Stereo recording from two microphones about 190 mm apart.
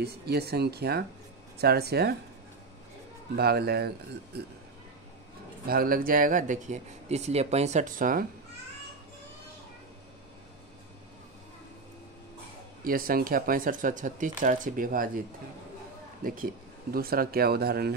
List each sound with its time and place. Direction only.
0.0 s speech: 60° right (ahead or behind)
3.3 s speech: 55° right (ahead or behind)
5.7 s speech: 50° right (ahead or behind)
12.8 s speech: 50° right (ahead or behind)
16.3 s speech: 50° right (ahead or behind)